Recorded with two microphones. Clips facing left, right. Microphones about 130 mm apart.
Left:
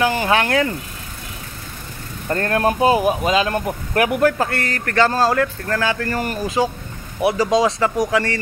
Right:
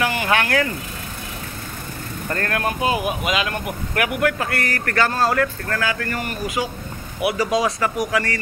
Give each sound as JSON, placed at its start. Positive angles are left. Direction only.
{"t": 0.0, "sound": "speech", "side_deg": 30}
{"t": 2.2, "sound": "speech", "side_deg": 25}